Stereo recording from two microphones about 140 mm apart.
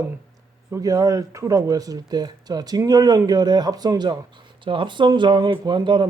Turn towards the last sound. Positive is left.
turn(degrees=-35)  # may be behind; listen again after turning